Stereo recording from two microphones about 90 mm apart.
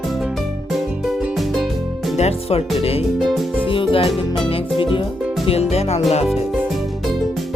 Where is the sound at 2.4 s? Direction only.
90° left.